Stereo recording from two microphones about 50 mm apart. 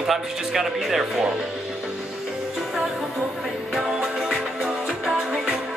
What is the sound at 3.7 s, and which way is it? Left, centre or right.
Music, centre.